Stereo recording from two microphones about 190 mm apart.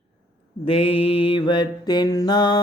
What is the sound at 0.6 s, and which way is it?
Mantra, 30° left (ahead or behind).